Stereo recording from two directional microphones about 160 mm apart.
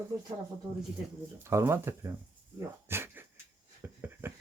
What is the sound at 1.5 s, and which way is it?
Speech, 15° right (ahead or behind).